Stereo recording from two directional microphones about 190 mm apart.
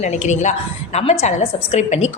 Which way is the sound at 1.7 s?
35° left (ahead or behind).